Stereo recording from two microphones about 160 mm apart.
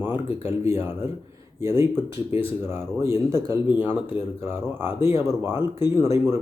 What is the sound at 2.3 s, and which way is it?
Speech, 35° left (ahead or behind).